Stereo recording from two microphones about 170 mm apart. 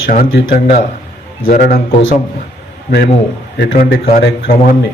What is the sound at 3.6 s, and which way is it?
Speech, 80° left.